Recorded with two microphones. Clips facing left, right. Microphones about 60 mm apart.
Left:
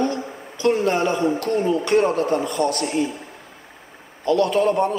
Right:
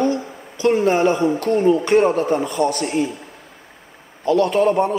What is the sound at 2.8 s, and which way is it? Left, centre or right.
Speech, centre.